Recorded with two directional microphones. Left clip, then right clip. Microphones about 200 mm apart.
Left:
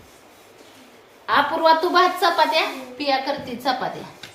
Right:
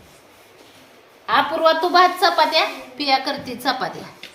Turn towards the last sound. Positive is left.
turn(degrees=-40)  # may be behind; listen again after turning